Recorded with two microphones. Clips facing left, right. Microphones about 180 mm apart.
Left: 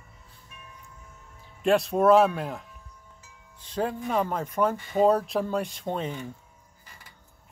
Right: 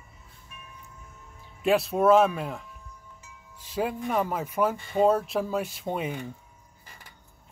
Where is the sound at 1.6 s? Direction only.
5° right (ahead or behind).